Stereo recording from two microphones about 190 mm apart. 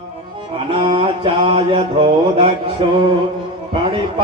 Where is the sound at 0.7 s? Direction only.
25° right (ahead or behind).